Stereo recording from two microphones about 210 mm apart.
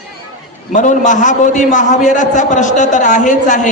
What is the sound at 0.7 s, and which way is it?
A man's voice, 35° left (ahead or behind).